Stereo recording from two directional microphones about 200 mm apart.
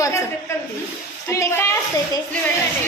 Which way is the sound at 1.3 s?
15° left (ahead or behind).